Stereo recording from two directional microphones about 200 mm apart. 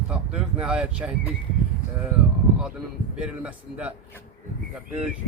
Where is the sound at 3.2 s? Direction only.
5° right (ahead or behind).